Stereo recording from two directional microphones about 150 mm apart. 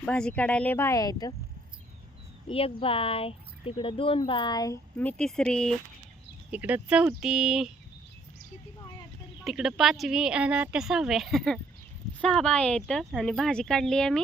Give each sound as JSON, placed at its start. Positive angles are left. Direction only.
{"t": 0.0, "sound": "speech", "side_deg": 5}
{"t": 2.5, "sound": "speech", "side_deg": 40}
{"t": 4.9, "sound": "a woman's voice", "side_deg": 10}
{"t": 6.5, "sound": "a woman's voice", "side_deg": -10}
{"t": 9.4, "sound": "a woman's voice", "side_deg": 0}